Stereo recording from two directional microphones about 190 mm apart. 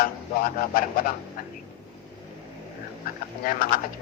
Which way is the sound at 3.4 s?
45° left (ahead or behind).